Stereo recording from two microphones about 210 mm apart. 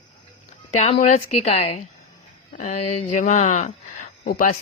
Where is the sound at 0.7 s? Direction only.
30° left (ahead or behind).